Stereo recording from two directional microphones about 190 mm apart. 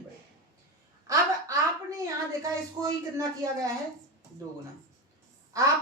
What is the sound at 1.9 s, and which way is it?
A woman's voice, 15° right (ahead or behind).